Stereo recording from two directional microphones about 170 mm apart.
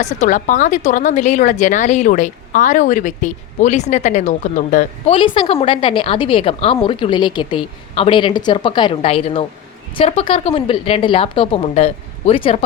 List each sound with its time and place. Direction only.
0.0 s a woman's voice: 45° left (ahead or behind)
5.1 s a woman's voice: 30° left (ahead or behind)